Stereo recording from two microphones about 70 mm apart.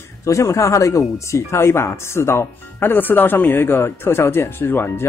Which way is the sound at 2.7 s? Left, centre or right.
Left.